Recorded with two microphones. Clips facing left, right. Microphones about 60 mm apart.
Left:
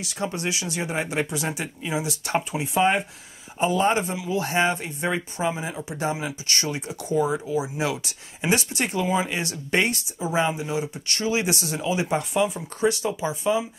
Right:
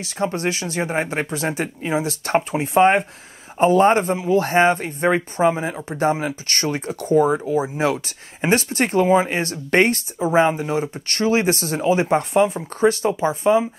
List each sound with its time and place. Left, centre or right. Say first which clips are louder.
0.0 s speech: right 6 dB; right